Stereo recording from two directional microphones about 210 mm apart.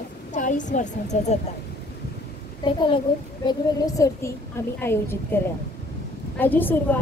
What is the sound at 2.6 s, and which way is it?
A child's voice, 25° left (ahead or behind).